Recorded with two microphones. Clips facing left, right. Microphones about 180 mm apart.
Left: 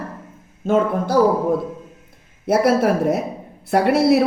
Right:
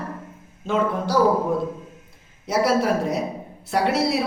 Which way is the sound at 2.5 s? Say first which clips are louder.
Left 4 dB; 55° left (ahead or behind).